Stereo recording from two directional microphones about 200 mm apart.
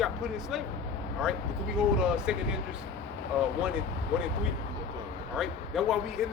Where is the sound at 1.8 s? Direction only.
5° right (ahead or behind).